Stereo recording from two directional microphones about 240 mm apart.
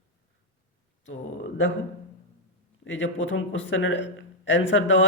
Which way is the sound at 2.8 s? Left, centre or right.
Left.